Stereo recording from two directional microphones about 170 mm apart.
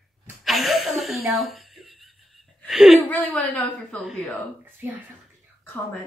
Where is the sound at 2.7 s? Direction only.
Centre (ahead or behind).